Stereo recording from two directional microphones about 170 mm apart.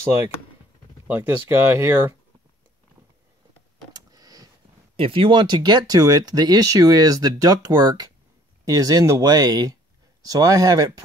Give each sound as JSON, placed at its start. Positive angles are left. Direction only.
{"t": 1.0, "sound": "speech", "side_deg": -10}
{"t": 3.9, "sound": "vehicle", "side_deg": -20}
{"t": 4.9, "sound": "speech", "side_deg": -30}